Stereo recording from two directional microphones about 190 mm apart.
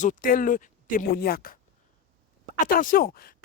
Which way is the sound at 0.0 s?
45° left (ahead or behind).